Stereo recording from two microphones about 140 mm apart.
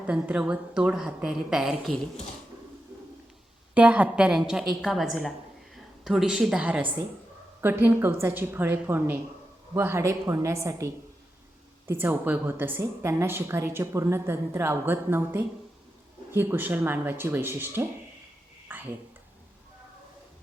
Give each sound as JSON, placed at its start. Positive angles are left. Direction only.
{"t": 0.1, "sound": "a woman's voice", "side_deg": -10}
{"t": 3.8, "sound": "a woman's voice", "side_deg": -10}
{"t": 18.7, "sound": "a sound", "side_deg": -15}